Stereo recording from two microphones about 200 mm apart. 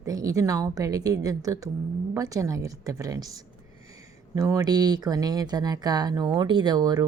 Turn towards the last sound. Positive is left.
turn(degrees=-20)  # may be behind; listen again after turning